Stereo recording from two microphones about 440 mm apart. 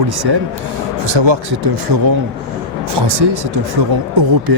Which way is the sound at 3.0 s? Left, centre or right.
Right.